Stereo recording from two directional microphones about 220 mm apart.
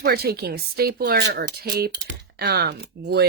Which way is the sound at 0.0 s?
45° right (ahead or behind).